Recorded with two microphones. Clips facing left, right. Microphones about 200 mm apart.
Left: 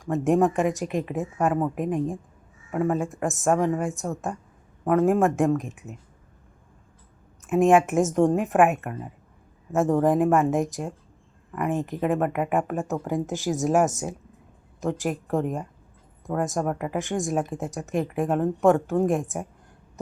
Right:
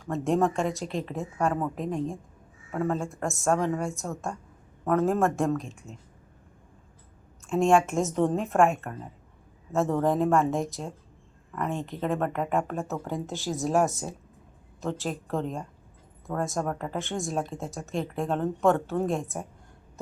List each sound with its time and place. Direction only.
0.0 s a woman's voice: 15° left (ahead or behind)
7.4 s a woman's voice: 15° left (ahead or behind)
13.4 s speech: centre (ahead or behind)
14.8 s a woman's voice: 15° left (ahead or behind)
17.7 s speech: centre (ahead or behind)
17.9 s a woman's voice: 15° left (ahead or behind)